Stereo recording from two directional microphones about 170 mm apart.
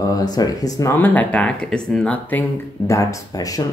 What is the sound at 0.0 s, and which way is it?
Speech, 20° left (ahead or behind).